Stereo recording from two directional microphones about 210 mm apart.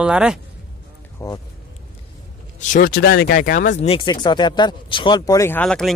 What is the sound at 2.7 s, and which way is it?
Speech, 45° left (ahead or behind).